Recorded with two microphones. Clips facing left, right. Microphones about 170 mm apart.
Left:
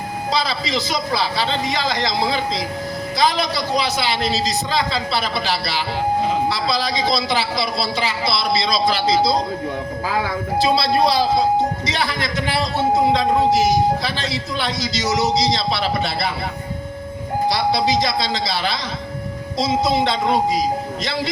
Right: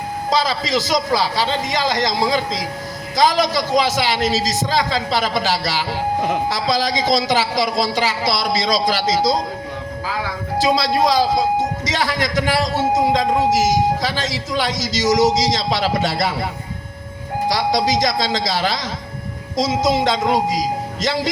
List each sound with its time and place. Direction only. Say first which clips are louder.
0.3 s a woman's voice: right 3 dB; 45° right (ahead or behind)
10.1 s speech: left 3 dB; 50° left (ahead or behind)
10.8 s a woman's voice: right 1 dB; 45° right (ahead or behind)
14.0 s a woman's voice: right 2 dB; 45° right (ahead or behind)
17.5 s a woman's voice: right 1 dB; 45° right (ahead or behind)